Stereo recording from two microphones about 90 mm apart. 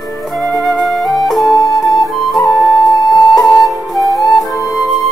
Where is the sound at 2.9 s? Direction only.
50° left (ahead or behind).